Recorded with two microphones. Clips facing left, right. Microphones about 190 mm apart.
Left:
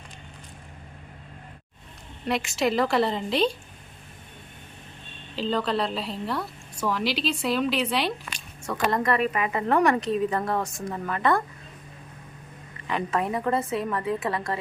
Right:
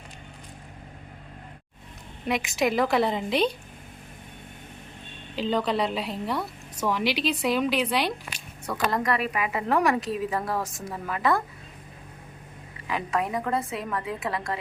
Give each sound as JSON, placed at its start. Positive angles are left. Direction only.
{"t": 2.2, "sound": "a woman's voice", "side_deg": -15}
{"t": 5.4, "sound": "a woman's voice", "side_deg": -15}
{"t": 8.6, "sound": "a woman's voice", "side_deg": 0}
{"t": 12.9, "sound": "a woman's voice", "side_deg": 0}